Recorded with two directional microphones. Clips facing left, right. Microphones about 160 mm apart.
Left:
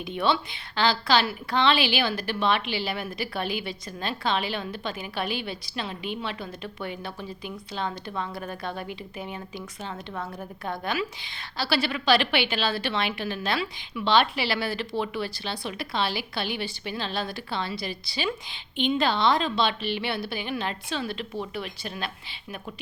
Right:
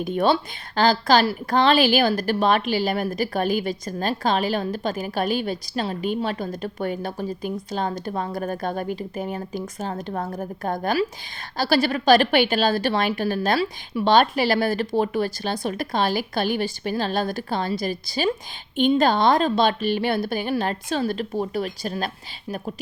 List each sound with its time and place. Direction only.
0.0 s a woman's voice: 45° right (ahead or behind)